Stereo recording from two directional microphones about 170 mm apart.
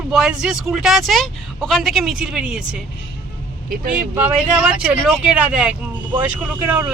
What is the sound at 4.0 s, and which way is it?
Speech, 5° right (ahead or behind).